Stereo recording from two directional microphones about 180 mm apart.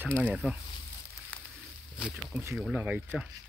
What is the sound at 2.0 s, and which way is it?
Speech, 5° right (ahead or behind).